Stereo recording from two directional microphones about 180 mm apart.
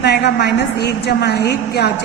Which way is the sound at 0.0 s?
65° left (ahead or behind).